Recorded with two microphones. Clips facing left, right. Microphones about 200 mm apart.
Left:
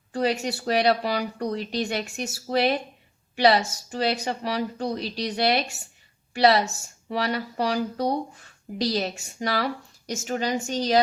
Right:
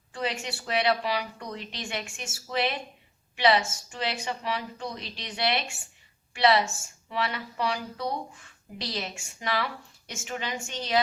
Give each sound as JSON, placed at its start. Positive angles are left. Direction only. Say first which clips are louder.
{"t": 0.1, "sound": "a woman's voice", "louder": "left 8 dB", "side_deg": 40}